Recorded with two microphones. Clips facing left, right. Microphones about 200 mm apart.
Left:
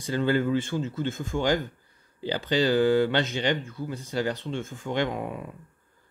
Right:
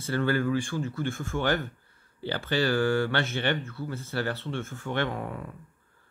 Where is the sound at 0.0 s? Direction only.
15° left (ahead or behind).